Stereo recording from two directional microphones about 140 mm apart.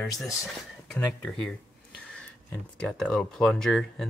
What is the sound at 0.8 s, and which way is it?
Speech, 5° left (ahead or behind).